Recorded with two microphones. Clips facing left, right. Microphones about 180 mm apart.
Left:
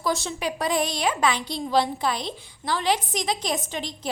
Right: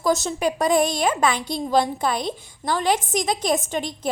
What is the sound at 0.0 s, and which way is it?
A woman's voice, 40° right (ahead or behind).